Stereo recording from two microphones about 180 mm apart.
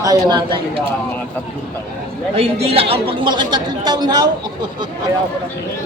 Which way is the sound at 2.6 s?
30° right (ahead or behind).